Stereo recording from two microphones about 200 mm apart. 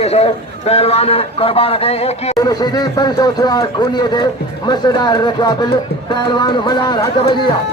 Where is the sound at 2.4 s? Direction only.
20° left (ahead or behind).